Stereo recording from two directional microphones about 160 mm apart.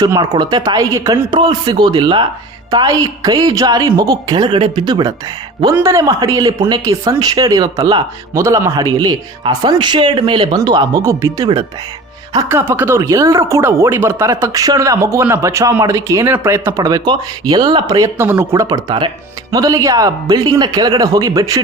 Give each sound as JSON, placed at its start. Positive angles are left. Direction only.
{"t": 0.0, "sound": "speech", "side_deg": -25}
{"t": 18.9, "sound": "speech", "side_deg": -30}